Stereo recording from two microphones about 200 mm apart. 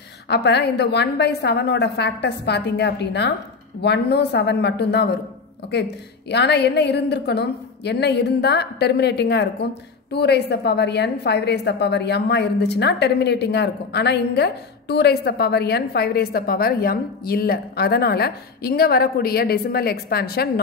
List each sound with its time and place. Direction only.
0.3 s a woman's voice: 55° left (ahead or behind)